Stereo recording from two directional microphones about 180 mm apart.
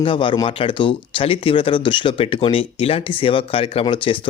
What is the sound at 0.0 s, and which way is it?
Speech, 30° left (ahead or behind).